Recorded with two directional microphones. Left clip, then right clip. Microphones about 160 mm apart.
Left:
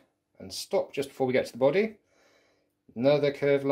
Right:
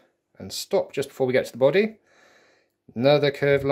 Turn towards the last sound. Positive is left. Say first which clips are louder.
# right 4 dB
turn(degrees=-40)  # may be behind; listen again after turning